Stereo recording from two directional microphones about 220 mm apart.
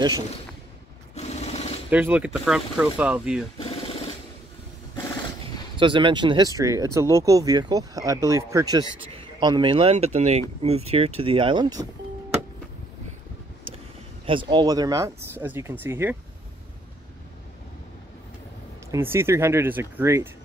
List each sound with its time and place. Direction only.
1.1 s sewing machine: 30° left (ahead or behind)
1.9 s speech: 5° right (ahead or behind)
3.5 s vehicle: 25° left (ahead or behind)
5.8 s speech: 20° right (ahead or behind)
14.2 s speech: 25° right (ahead or behind)
18.9 s speech: 10° right (ahead or behind)